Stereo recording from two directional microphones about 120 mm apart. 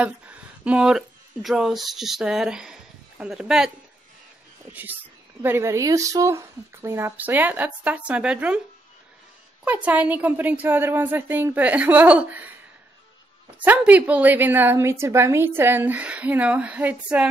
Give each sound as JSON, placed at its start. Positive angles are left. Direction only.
{"t": 0.0, "sound": "speech", "side_deg": -10}
{"t": 5.4, "sound": "speech", "side_deg": -20}
{"t": 9.7, "sound": "a woman's voice", "side_deg": -10}
{"t": 13.6, "sound": "a woman's voice", "side_deg": -10}